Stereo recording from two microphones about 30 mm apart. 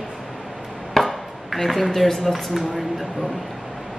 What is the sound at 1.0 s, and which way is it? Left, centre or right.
Speech, centre.